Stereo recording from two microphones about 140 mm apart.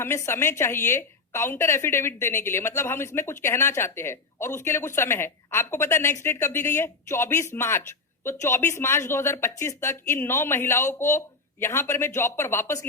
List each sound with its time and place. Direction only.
0.0 s a woman's voice: 20° left (ahead or behind)